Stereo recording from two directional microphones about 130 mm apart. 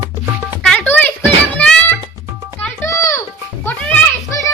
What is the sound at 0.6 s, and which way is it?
Music, 10° left (ahead or behind).